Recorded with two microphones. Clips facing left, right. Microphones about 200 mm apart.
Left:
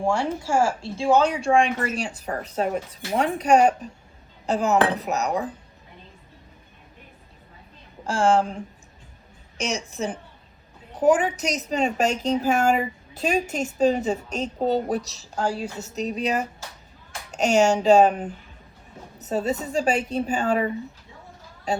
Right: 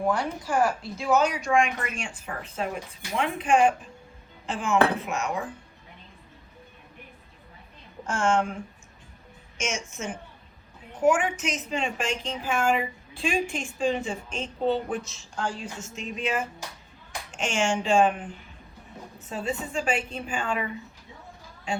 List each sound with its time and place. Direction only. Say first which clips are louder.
0.0 s a woman's voice: left 3 dB; 30° left (ahead or behind)
8.0 s a woman's voice: left 4 dB; 35° left (ahead or behind)